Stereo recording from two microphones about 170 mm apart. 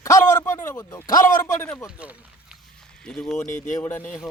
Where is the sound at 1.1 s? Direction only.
50° left (ahead or behind).